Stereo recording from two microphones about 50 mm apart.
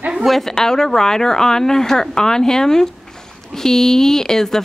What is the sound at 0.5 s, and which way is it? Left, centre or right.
A woman's voice, centre.